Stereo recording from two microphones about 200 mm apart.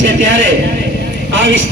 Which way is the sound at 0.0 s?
65° right (ahead or behind).